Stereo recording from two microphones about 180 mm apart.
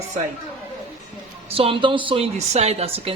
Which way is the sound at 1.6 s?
30° right (ahead or behind).